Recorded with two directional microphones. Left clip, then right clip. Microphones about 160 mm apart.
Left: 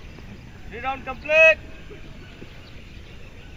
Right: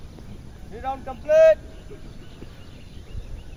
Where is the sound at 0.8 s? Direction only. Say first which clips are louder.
Left 2 dB; 30° right (ahead or behind).